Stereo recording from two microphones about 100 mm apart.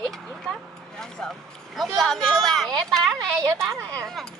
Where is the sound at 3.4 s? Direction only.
35° right (ahead or behind).